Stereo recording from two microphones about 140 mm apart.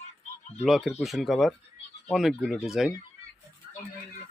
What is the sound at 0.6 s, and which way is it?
Speech, centre (ahead or behind).